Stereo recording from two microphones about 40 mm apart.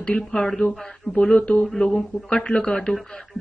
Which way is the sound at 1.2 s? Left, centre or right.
Left.